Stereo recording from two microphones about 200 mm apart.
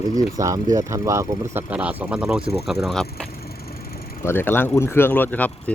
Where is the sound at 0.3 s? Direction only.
15° right (ahead or behind).